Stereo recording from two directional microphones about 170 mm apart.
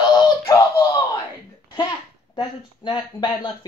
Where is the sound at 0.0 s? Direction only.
25° left (ahead or behind).